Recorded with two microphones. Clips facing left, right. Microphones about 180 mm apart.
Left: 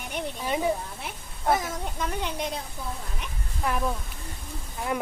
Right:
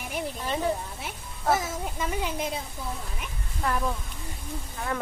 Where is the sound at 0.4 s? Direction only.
10° left (ahead or behind).